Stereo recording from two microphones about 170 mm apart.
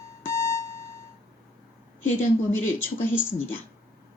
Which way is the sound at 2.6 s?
10° left (ahead or behind).